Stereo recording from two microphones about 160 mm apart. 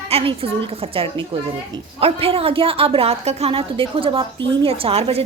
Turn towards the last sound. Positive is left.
turn(degrees=-40)  # may be behind; listen again after turning